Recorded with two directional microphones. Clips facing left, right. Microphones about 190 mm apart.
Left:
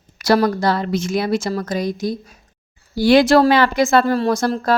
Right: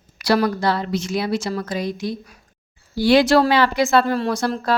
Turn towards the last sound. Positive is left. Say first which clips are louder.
# left 3 dB
turn(degrees=45)  # may be behind; listen again after turning